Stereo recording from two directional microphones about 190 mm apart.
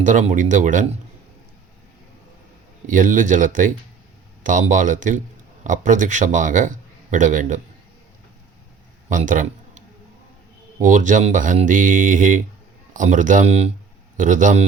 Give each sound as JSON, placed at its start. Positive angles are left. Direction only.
{"t": 0.0, "sound": "a man's voice", "side_deg": -40}
{"t": 2.8, "sound": "a man's voice", "side_deg": -45}
{"t": 9.0, "sound": "a sound", "side_deg": -45}
{"t": 10.8, "sound": "a man's voice", "side_deg": -40}